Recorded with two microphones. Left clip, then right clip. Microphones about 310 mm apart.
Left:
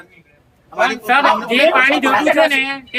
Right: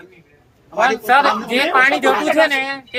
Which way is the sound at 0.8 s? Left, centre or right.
Centre.